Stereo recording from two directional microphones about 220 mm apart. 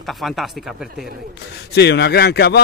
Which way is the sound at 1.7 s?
50° left (ahead or behind).